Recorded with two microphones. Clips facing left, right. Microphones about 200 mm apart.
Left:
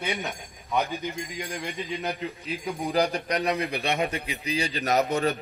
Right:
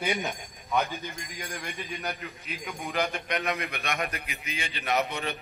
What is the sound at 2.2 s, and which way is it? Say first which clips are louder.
A man's voice: left 7 dB; 35° left (ahead or behind).